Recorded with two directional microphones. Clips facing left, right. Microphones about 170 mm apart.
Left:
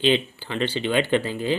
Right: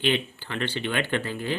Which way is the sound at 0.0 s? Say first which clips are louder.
Left 5 dB; 15° left (ahead or behind).